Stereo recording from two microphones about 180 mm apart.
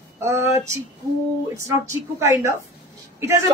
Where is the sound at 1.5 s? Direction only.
15° right (ahead or behind).